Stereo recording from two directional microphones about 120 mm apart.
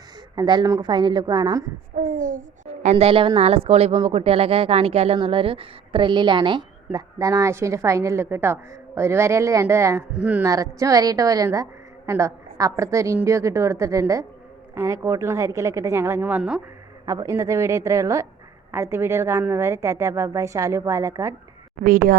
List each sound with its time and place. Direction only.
0.3 s a woman's voice: 35° right (ahead or behind)
2.0 s speech: 90° right
2.8 s speech: 60° right (ahead or behind); by 6.7 s 40° right (ahead or behind)
6.9 s a woman's voice: 30° right (ahead or behind)
10.1 s speech: 10° right (ahead or behind)
10.4 s a woman's voice: 30° right (ahead or behind)